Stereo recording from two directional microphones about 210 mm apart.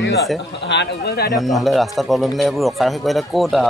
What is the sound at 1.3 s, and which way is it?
Speech, centre (ahead or behind).